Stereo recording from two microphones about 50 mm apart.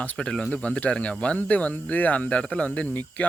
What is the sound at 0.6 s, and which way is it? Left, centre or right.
Speech, left.